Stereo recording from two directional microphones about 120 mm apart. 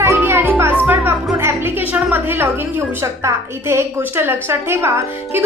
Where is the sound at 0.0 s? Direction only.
20° right (ahead or behind).